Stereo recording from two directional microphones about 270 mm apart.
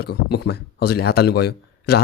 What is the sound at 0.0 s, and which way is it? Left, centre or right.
Speech, left.